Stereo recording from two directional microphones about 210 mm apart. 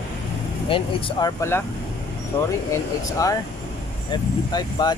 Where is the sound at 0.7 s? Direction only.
25° left (ahead or behind).